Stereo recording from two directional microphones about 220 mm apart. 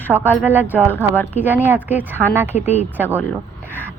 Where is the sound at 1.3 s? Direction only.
10° right (ahead or behind).